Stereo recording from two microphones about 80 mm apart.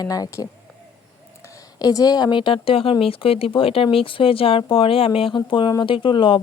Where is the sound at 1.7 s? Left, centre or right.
Left.